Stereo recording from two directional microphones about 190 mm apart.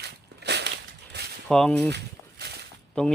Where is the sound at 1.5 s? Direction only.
5° left (ahead or behind).